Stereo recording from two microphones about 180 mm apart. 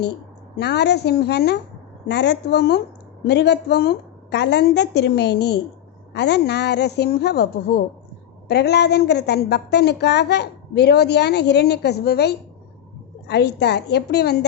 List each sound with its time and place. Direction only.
0.5 s a woman's voice: 65° left (ahead or behind)